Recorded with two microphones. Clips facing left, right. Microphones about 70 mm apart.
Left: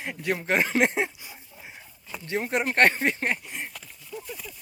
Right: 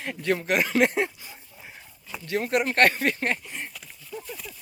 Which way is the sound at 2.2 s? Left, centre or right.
Left.